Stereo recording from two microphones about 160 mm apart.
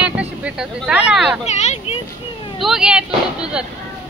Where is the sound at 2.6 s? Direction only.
5° right (ahead or behind).